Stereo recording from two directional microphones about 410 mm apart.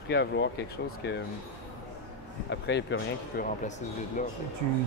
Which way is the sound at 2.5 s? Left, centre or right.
Left.